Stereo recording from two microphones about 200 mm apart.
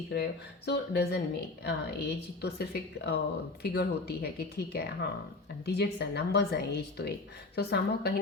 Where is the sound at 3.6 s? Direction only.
55° left (ahead or behind).